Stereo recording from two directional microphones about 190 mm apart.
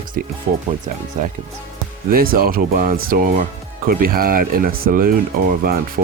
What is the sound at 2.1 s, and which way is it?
Speech, 50° right (ahead or behind).